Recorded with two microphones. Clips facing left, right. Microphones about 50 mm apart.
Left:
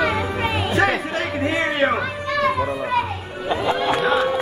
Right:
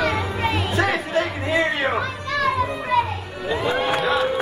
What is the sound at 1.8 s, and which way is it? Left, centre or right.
A child's voice, centre.